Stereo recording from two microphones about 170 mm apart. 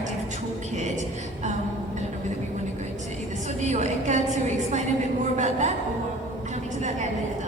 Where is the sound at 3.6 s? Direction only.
45° right (ahead or behind).